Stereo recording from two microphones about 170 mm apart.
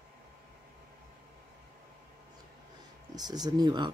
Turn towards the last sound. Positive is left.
turn(degrees=-25)  # may be behind; listen again after turning